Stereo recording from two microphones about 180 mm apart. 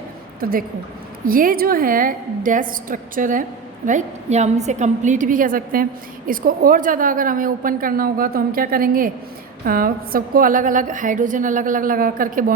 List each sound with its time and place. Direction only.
0.3 s a woman's voice: 55° right (ahead or behind)